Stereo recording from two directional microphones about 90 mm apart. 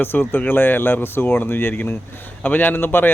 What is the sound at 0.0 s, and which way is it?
Speech, 25° left (ahead or behind).